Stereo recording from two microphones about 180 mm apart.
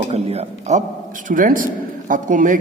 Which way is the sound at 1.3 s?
50° right (ahead or behind).